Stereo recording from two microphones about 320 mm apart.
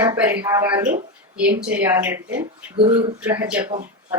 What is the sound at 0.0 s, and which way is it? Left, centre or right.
Speech, centre.